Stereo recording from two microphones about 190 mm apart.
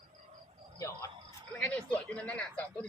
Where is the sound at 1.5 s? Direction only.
5° left (ahead or behind).